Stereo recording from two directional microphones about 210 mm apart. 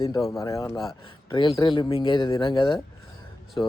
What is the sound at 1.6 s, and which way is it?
Speech, 25° left (ahead or behind).